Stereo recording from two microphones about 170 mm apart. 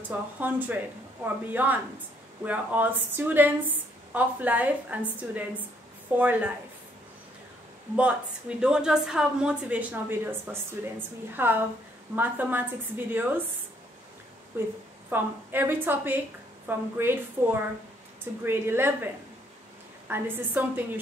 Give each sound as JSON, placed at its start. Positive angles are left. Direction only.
{"t": 0.4, "sound": "a woman's voice", "side_deg": -10}
{"t": 7.9, "sound": "a woman's voice", "side_deg": -5}
{"t": 14.5, "sound": "a woman's voice", "side_deg": -10}
{"t": 20.1, "sound": "a woman's voice", "side_deg": -10}